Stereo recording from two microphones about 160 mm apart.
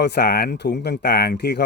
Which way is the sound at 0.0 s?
90° left.